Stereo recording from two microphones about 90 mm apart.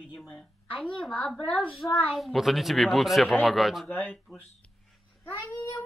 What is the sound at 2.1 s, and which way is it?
A woman's voice, centre (ahead or behind).